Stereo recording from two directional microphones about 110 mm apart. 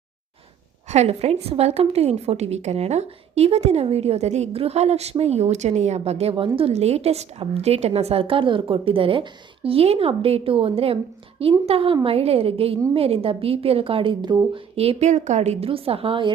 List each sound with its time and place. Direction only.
0.9 s a woman's voice: 80° right; by 14.3 s 45° right (ahead or behind)
14.5 s a woman's voice: 65° right (ahead or behind)